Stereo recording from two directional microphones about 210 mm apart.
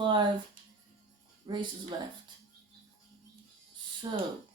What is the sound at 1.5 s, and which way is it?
Speech, 20° right (ahead or behind).